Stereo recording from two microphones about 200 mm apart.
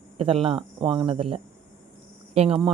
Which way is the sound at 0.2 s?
30° right (ahead or behind).